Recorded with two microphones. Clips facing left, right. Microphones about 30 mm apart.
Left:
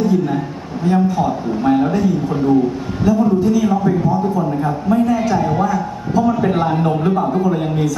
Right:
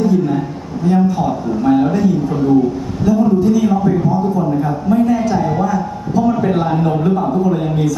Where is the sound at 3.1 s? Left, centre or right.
Centre.